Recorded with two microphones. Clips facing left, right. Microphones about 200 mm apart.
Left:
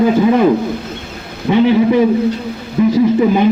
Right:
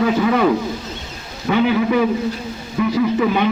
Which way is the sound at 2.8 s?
30° left (ahead or behind).